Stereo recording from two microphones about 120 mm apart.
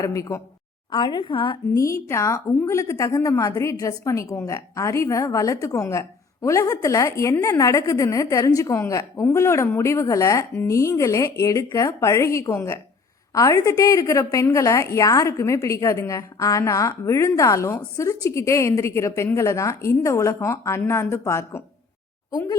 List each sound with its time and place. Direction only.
0.0 s a woman's voice: 25° left (ahead or behind)
0.9 s a woman's voice: 40° left (ahead or behind)
1.7 s a woman's voice: 25° left (ahead or behind)
22.3 s speech: 35° left (ahead or behind)